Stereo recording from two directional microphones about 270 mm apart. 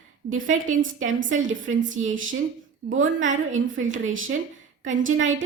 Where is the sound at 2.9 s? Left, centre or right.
Right.